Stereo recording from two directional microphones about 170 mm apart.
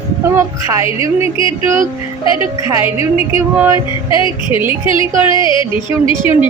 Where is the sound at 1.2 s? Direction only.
30° left (ahead or behind).